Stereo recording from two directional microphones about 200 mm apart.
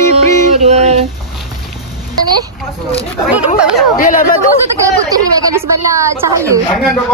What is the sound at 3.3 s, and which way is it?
Speech, 5° right (ahead or behind).